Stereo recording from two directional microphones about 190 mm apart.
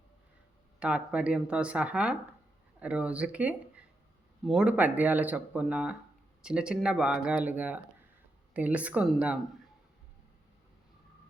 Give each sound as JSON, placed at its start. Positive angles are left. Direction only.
{"t": 0.8, "sound": "speech", "side_deg": -5}